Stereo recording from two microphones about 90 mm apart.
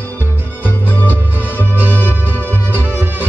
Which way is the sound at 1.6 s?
20° right (ahead or behind).